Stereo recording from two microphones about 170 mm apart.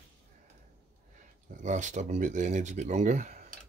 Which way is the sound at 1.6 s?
45° right (ahead or behind).